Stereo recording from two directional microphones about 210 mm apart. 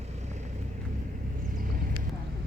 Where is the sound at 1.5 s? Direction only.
40° right (ahead or behind).